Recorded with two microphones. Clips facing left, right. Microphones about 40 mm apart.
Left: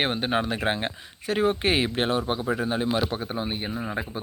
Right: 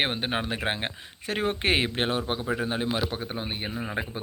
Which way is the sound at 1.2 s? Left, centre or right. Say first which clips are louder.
Left 3 dB; right.